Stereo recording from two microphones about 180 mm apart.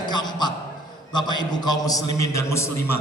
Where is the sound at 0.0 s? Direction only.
25° left (ahead or behind).